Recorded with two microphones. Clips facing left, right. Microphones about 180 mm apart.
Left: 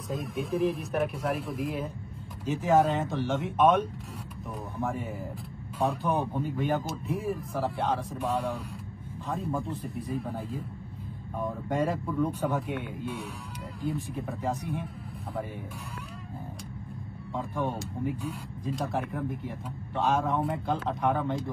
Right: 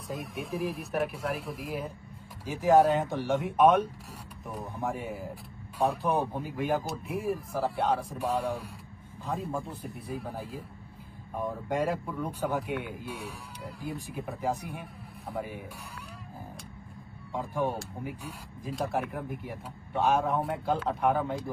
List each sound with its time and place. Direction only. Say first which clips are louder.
0.1 s speech: left 4 dB; centre (ahead or behind)
3.0 s speech: left 1 dB; 15° right (ahead or behind)
3.3 s speech: right 1 dB; centre (ahead or behind)
11.7 s speech: left 2 dB; centre (ahead or behind)
17.6 s speech: right 1 dB; centre (ahead or behind)